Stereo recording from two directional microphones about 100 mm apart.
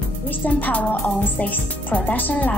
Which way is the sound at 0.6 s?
15° left (ahead or behind).